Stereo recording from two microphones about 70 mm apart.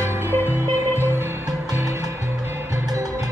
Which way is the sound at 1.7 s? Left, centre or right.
Right.